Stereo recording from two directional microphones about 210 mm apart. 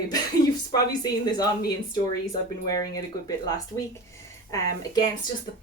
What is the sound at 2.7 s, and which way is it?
Speech, 15° left (ahead or behind).